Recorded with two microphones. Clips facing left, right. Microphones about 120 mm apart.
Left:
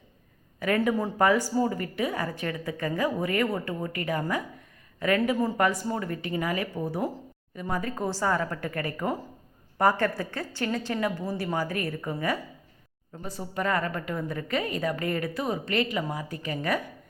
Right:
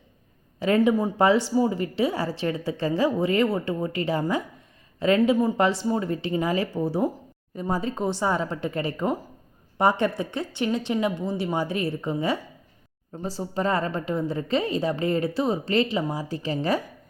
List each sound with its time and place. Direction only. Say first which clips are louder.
0.6 s a woman's voice: right 5 dB; 30° right (ahead or behind)